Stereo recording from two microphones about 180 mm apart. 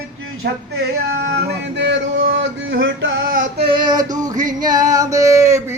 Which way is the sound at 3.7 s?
25° right (ahead or behind).